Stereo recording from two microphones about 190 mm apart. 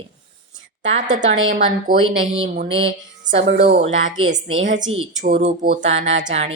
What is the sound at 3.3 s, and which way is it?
Speech, 70° right (ahead or behind).